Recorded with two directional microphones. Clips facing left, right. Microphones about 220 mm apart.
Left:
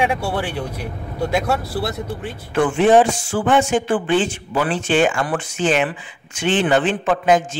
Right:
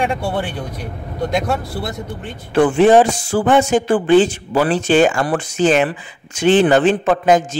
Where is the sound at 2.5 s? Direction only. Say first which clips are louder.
Right 3 dB; 35° right (ahead or behind).